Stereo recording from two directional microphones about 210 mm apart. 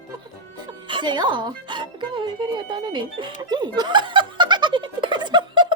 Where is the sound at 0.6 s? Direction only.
20° right (ahead or behind).